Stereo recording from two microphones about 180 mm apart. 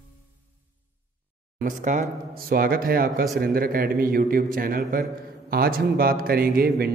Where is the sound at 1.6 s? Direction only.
45° right (ahead or behind).